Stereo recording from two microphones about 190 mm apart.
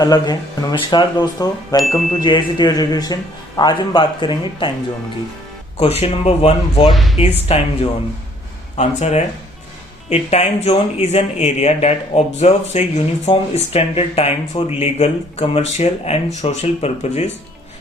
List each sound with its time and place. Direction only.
0.0 s a man's voice: 20° left (ahead or behind)
5.7 s speech: 30° left (ahead or behind)
6.9 s speech: centre (ahead or behind)
7.2 s speech: 30° left (ahead or behind)